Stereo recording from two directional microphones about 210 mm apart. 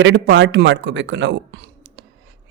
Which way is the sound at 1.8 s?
55° right (ahead or behind).